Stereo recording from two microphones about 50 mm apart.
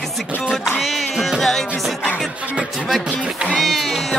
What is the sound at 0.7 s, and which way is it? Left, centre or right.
Music, centre.